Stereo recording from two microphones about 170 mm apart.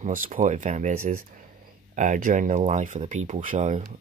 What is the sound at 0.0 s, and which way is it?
Speech, 50° right (ahead or behind).